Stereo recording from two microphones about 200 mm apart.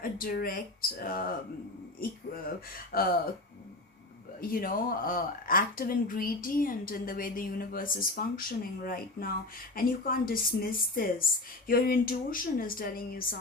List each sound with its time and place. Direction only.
0.0 s speech: 45° left (ahead or behind)
2.7 s speech: 50° left (ahead or behind)
4.4 s speech: 45° left (ahead or behind)